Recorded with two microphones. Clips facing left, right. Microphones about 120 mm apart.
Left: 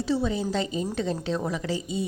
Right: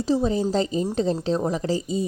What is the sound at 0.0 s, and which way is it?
A woman's voice, 40° right (ahead or behind).